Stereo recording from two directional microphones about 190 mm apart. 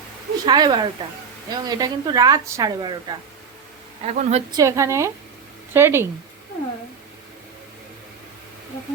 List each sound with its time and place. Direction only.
0.4 s a woman's voice: 20° right (ahead or behind)
4.0 s speech: 35° right (ahead or behind)
4.5 s a woman's voice: 15° right (ahead or behind)